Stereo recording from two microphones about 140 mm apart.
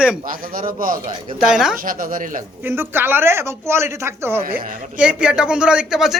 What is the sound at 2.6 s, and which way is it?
Speech, 15° right (ahead or behind).